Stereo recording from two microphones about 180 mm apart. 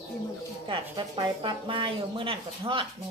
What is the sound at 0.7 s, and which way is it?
Speech, 30° right (ahead or behind).